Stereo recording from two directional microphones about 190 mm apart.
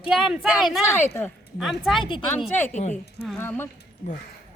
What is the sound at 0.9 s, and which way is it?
Speech, 15° left (ahead or behind).